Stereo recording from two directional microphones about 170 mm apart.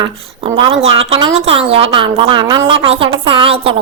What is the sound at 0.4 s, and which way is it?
A woman's voice, 35° right (ahead or behind).